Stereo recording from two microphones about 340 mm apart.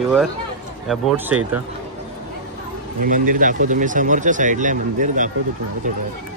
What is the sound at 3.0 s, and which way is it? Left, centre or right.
Speech, right.